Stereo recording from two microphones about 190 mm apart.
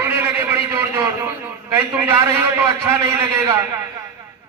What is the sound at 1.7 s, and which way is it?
A man's voice, 15° right (ahead or behind).